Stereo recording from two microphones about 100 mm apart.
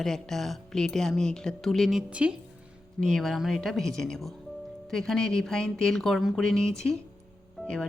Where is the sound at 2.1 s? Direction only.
10° right (ahead or behind).